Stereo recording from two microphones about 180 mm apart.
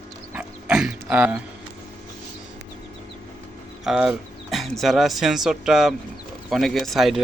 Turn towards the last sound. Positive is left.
turn(degrees=0)  # may be behind; listen again after turning